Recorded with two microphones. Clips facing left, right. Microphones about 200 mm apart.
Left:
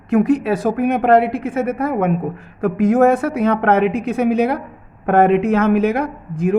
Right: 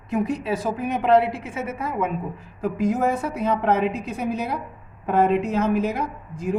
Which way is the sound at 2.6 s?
75° left (ahead or behind).